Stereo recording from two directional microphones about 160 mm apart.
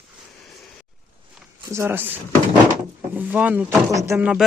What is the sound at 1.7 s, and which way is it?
Speech, 15° right (ahead or behind).